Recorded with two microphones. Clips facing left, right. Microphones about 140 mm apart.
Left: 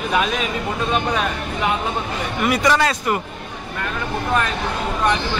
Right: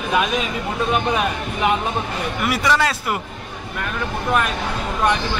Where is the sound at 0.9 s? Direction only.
15° right (ahead or behind).